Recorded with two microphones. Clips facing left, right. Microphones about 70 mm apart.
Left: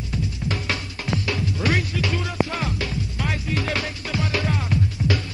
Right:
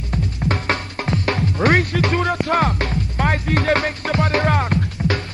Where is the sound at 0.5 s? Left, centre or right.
Right.